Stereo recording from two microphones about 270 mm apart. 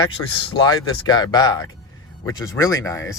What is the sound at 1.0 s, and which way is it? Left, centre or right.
Speech, centre.